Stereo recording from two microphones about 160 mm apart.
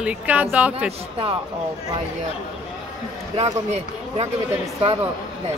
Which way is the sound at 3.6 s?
40° right (ahead or behind).